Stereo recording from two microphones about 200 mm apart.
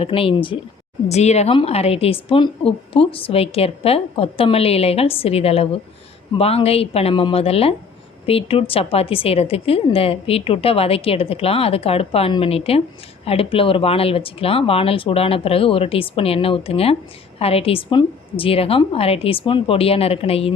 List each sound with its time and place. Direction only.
0.0 s a woman's voice: 25° left (ahead or behind)